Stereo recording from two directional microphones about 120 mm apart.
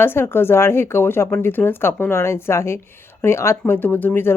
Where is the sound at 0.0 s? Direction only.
20° left (ahead or behind).